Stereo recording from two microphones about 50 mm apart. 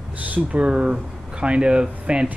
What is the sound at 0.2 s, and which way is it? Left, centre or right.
Speech, right.